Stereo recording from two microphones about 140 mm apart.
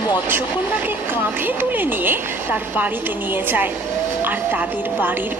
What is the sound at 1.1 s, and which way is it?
Speech, 15° right (ahead or behind).